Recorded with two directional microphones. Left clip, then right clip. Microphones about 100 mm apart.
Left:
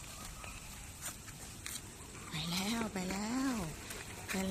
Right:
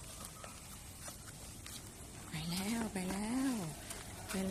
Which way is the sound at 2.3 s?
15° right (ahead or behind).